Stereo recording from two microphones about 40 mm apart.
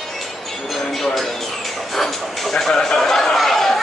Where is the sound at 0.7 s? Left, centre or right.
Centre.